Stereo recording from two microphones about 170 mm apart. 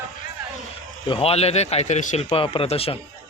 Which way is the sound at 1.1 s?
35° left (ahead or behind).